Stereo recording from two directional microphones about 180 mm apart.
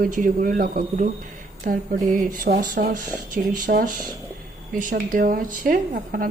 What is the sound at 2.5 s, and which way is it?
Speech, 65° right (ahead or behind).